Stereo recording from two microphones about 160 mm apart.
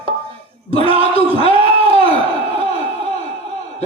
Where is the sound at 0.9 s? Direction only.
35° right (ahead or behind).